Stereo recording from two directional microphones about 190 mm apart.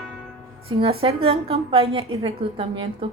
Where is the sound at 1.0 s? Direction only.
30° right (ahead or behind).